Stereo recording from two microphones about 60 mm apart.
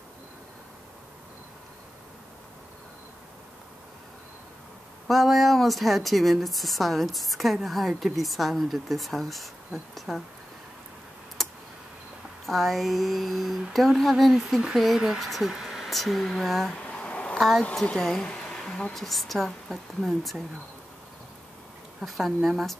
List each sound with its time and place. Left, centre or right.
5.0 s speech: centre
11.4 s clicking: centre
12.4 s speech: centre
16.8 s a sound: centre
17.4 s speech: centre
18.3 s a sound: centre
19.0 s speech: centre
22.0 s speech: centre